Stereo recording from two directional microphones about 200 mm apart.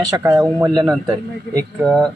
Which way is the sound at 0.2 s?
15° right (ahead or behind).